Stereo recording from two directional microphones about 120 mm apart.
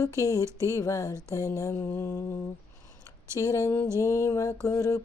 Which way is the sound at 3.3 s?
25° left (ahead or behind).